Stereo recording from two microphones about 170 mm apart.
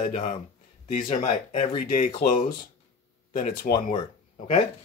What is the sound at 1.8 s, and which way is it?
Speech, 55° left (ahead or behind).